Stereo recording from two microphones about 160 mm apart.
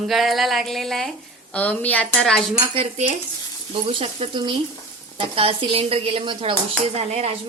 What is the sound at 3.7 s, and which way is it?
A woman's voice, 35° right (ahead or behind).